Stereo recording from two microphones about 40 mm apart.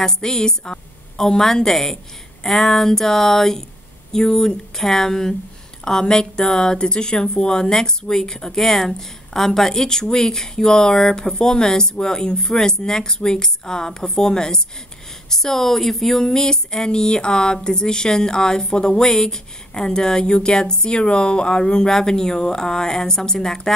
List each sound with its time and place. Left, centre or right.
0.0 s speech: centre